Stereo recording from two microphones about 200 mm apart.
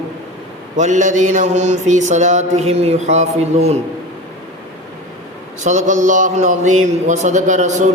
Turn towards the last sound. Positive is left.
turn(degrees=-35)  # may be behind; listen again after turning